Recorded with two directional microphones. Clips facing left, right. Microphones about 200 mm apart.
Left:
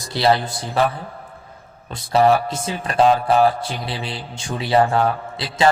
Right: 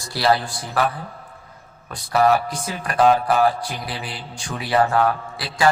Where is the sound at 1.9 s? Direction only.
25° left (ahead or behind).